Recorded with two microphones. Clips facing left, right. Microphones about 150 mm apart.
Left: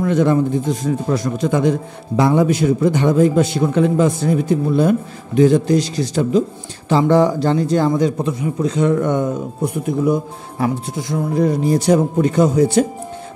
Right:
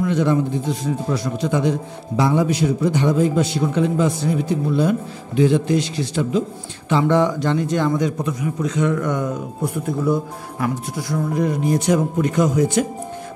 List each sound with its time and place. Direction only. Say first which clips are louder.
0.0 s a man's voice: left 3 dB; 50° left (ahead or behind); by 11.4 s 20° left (ahead or behind)
11.4 s speech: left 5 dB; 30° left (ahead or behind)